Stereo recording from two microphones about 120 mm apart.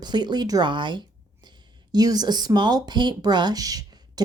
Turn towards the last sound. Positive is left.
turn(degrees=-30)  # may be behind; listen again after turning